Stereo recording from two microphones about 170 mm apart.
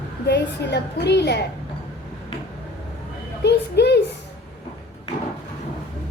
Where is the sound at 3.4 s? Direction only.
80° left.